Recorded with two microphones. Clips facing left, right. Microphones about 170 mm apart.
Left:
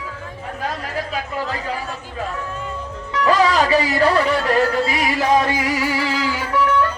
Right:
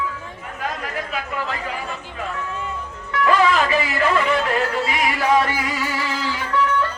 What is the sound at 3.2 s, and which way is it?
Music, 40° left (ahead or behind).